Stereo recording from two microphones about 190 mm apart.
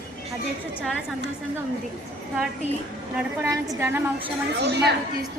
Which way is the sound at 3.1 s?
15° right (ahead or behind).